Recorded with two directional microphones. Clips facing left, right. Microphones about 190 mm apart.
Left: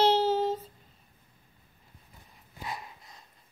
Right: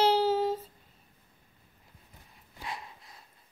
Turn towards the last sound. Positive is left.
turn(degrees=-5)  # may be behind; listen again after turning